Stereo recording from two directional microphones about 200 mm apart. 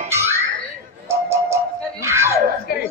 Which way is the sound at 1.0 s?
15° right (ahead or behind).